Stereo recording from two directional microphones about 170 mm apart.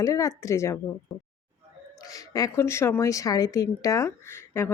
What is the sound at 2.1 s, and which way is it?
A woman's voice, 20° left (ahead or behind).